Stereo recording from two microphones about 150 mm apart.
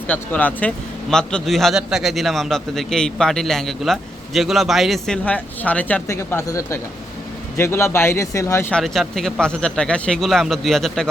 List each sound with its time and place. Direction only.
0.1 s a man's voice: 10° left (ahead or behind)
8.7 s a man's voice: centre (ahead or behind)